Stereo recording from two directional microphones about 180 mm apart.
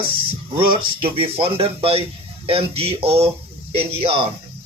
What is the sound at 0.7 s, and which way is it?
Speech, 30° right (ahead or behind).